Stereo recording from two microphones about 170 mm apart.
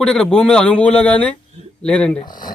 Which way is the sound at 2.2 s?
25° left (ahead or behind).